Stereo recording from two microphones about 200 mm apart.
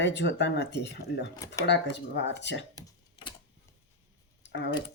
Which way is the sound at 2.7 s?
25° left (ahead or behind).